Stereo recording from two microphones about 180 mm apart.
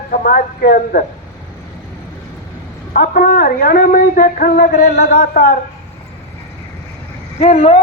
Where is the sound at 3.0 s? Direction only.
50° left (ahead or behind).